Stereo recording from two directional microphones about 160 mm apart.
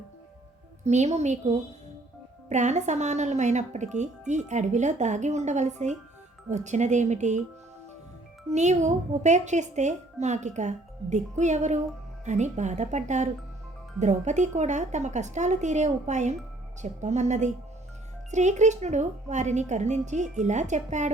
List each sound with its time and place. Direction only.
0.9 s a woman's voice: 45° right (ahead or behind)
2.5 s a woman's voice: 45° right (ahead or behind)
8.4 s a woman's voice: 45° right (ahead or behind)